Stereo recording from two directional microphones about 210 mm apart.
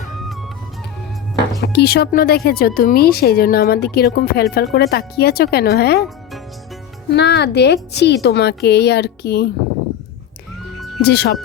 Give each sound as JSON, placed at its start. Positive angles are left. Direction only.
{"t": 1.6, "sound": "speech", "side_deg": 50}
{"t": 7.1, "sound": "speech", "side_deg": 55}
{"t": 11.0, "sound": "speech", "side_deg": 50}